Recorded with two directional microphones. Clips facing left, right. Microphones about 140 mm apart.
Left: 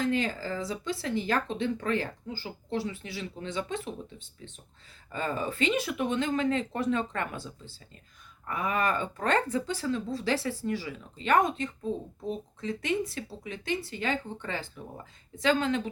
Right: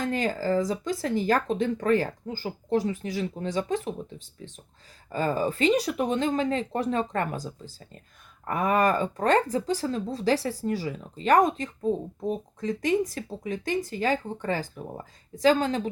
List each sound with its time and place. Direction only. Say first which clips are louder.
0.0 s speech: right 2 dB; 45° right (ahead or behind)
5.1 s speech: right 6 dB; 35° right (ahead or behind)